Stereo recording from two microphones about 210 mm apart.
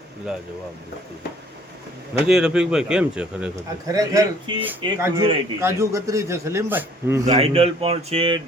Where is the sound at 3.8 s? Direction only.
15° right (ahead or behind).